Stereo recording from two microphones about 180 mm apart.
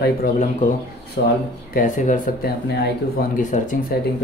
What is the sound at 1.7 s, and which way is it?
Speech, 45° left (ahead or behind).